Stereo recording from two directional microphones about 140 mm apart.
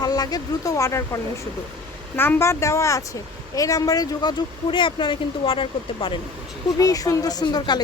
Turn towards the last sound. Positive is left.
turn(degrees=30)  # may be behind; listen again after turning